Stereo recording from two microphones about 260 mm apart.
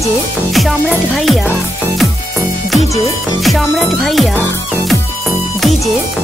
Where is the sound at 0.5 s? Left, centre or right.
Centre.